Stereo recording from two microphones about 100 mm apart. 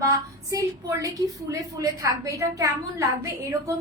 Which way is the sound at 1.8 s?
35° right (ahead or behind).